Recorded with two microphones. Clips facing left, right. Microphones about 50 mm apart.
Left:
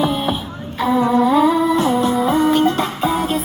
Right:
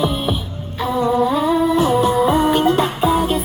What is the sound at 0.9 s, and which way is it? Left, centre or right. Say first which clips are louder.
Humming: left 2 dB; centre.